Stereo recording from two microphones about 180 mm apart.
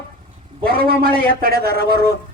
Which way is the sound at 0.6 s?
55° right (ahead or behind).